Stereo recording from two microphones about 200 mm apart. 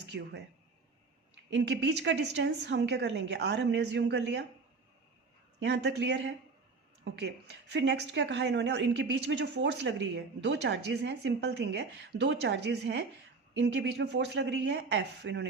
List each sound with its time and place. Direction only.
0.0 s speech: 55° right (ahead or behind)
1.5 s a woman's voice: 60° right (ahead or behind)
5.5 s a woman's voice: 60° right (ahead or behind)